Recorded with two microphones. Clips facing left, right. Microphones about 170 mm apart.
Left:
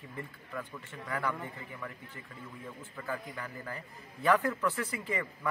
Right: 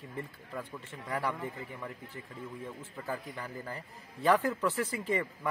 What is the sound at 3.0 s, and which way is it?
A man's voice, 30° right (ahead or behind).